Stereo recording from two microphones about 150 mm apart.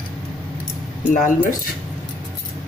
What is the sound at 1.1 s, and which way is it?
Speech, 65° left (ahead or behind).